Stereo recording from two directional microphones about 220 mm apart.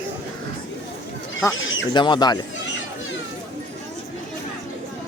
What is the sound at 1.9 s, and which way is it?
Speech, 20° left (ahead or behind).